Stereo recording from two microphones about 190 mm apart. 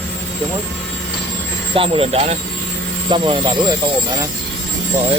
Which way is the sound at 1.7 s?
30° right (ahead or behind).